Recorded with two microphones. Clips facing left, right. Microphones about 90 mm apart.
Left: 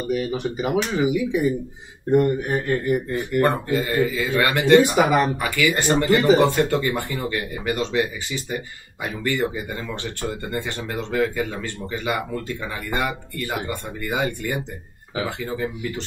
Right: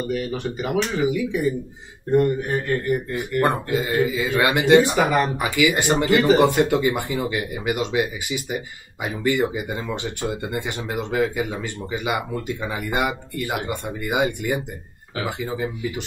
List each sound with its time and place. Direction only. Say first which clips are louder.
0.1 s speech: left 2 dB; 15° left (ahead or behind)
3.1 s speech: left 1 dB; 15° right (ahead or behind)